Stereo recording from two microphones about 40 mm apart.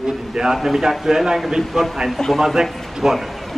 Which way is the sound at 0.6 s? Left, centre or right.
Centre.